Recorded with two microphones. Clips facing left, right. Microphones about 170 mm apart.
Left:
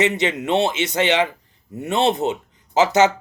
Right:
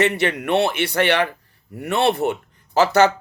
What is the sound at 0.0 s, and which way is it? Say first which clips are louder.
A man's voice: even; 20° left (ahead or behind).